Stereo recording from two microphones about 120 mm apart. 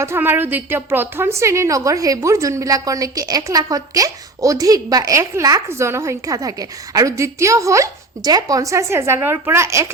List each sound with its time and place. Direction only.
0.0 s a woman's voice: 20° right (ahead or behind)